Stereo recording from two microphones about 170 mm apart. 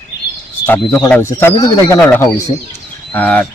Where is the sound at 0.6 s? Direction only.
10° left (ahead or behind).